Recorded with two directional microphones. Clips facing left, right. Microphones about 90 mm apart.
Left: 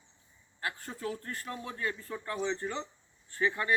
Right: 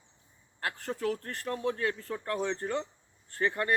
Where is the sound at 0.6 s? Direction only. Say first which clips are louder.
Right 4 dB; 70° right (ahead or behind).